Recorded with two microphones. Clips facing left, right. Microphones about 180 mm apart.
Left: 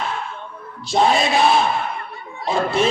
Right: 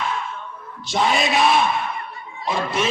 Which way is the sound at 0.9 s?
30° left (ahead or behind).